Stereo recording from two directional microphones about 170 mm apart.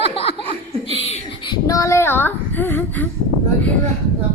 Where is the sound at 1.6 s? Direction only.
20° left (ahead or behind).